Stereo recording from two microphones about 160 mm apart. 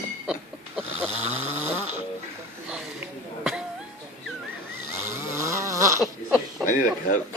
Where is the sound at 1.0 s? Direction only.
15° right (ahead or behind).